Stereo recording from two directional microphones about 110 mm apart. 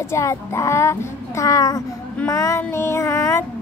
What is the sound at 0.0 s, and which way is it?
Speech, 25° left (ahead or behind).